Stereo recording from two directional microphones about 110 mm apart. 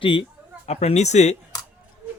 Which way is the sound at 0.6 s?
75° left (ahead or behind).